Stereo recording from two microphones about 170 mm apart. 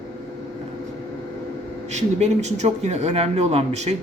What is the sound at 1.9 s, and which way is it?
Speech, 40° right (ahead or behind).